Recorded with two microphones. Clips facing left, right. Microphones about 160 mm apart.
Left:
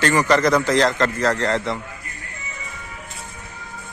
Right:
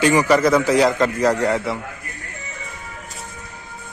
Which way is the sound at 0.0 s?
10° right (ahead or behind).